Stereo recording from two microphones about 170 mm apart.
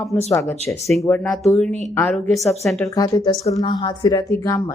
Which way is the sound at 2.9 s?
20° left (ahead or behind).